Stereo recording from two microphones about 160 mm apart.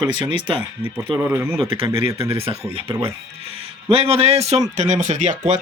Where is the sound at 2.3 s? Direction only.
40° right (ahead or behind).